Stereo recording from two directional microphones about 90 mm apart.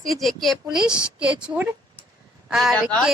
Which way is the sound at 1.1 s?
15° right (ahead or behind).